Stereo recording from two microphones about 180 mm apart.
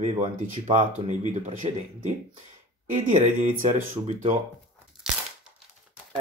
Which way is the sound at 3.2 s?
45° right (ahead or behind).